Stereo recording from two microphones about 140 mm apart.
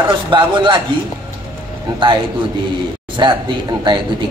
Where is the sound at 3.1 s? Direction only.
35° right (ahead or behind).